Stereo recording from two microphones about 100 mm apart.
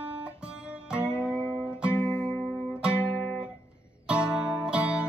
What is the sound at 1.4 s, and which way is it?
Music, 20° left (ahead or behind).